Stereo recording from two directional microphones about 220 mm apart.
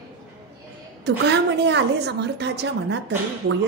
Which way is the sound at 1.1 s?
50° right (ahead or behind).